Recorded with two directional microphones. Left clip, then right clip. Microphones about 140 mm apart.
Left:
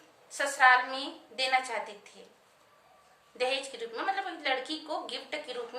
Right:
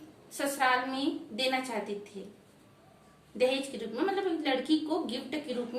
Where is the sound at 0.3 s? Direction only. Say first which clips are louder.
Left 5 dB; 20° left (ahead or behind).